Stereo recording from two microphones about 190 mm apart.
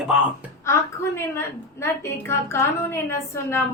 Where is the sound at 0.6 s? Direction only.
15° left (ahead or behind).